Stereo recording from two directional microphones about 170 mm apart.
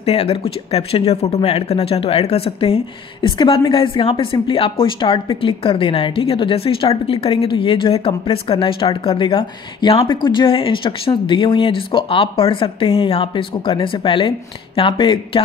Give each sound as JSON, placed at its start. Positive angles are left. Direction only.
{"t": 0.0, "sound": "speech", "side_deg": 35}